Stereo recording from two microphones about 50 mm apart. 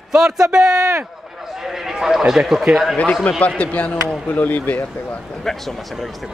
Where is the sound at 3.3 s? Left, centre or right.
Left.